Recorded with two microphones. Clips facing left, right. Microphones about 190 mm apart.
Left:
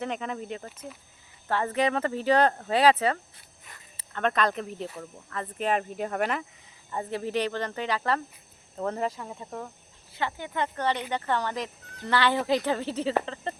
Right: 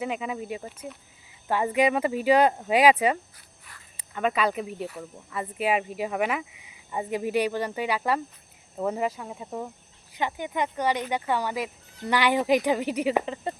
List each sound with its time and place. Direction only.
0.0 s speech: 5° right (ahead or behind)